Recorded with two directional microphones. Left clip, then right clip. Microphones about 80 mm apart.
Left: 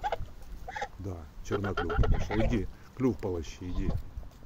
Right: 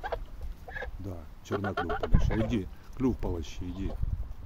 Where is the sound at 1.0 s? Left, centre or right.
Centre.